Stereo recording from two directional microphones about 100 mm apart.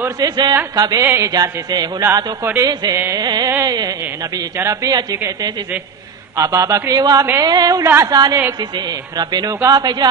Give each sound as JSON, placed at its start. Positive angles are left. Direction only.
{"t": 0.2, "sound": "a man's voice", "side_deg": -40}
{"t": 1.0, "sound": "a woman's voice", "side_deg": -25}
{"t": 1.3, "sound": "a man's voice", "side_deg": -40}
{"t": 6.3, "sound": "a man's voice", "side_deg": -35}
{"t": 7.8, "sound": "a woman's voice", "side_deg": -25}
{"t": 8.1, "sound": "a man's voice", "side_deg": -40}
{"t": 9.5, "sound": "a man's voice", "side_deg": -35}